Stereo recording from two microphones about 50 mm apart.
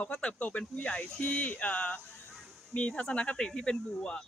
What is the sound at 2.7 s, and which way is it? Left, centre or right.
Speech, centre.